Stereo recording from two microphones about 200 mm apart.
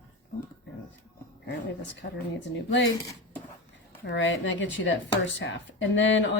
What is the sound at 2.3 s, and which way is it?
Speech, 65° left (ahead or behind).